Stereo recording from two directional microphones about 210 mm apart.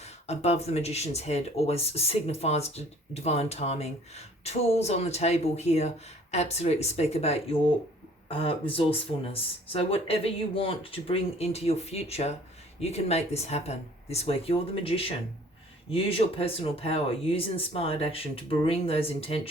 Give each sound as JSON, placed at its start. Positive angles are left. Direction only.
{"t": 0.0, "sound": "speech", "side_deg": 30}